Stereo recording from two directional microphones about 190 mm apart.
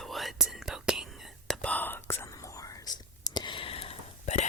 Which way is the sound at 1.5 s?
10° left (ahead or behind).